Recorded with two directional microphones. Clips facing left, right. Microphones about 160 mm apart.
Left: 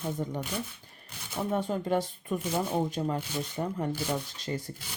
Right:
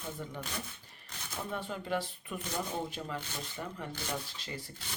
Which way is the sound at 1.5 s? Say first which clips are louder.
Left 7 dB; 40° left (ahead or behind).